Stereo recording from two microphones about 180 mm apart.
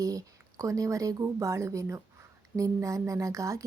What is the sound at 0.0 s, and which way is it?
Speech, 20° right (ahead or behind).